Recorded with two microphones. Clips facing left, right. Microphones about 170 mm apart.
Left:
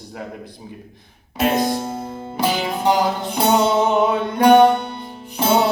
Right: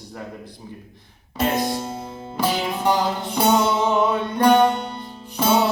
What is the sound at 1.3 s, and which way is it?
Music, 15° left (ahead or behind).